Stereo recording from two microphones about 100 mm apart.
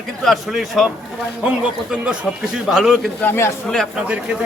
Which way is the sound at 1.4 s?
10° right (ahead or behind).